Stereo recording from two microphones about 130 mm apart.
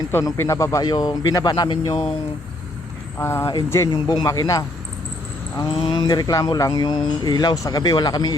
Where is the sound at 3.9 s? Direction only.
30° left (ahead or behind).